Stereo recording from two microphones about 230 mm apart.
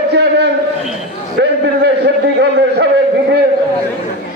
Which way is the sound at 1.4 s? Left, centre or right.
Right.